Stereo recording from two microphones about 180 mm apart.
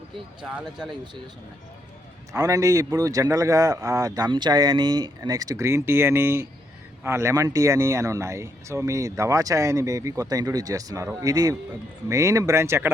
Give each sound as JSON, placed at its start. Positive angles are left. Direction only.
{"t": 0.4, "sound": "speech", "side_deg": -5}
{"t": 2.3, "sound": "speech", "side_deg": -20}